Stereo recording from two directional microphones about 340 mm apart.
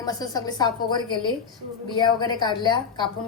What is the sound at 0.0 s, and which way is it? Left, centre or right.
A woman's voice, centre.